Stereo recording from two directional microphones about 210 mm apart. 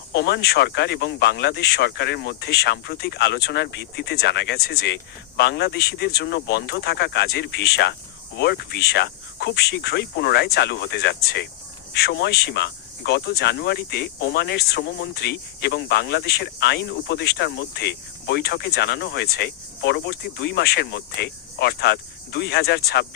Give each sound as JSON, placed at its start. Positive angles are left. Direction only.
{"t": 0.1, "sound": "speech", "side_deg": 50}